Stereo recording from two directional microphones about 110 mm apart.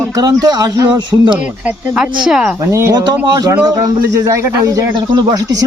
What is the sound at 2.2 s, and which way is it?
Speech, 5° right (ahead or behind).